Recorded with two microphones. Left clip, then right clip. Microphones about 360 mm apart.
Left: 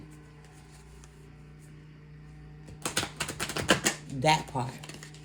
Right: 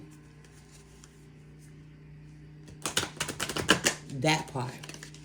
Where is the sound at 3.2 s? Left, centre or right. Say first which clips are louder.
Even; centre.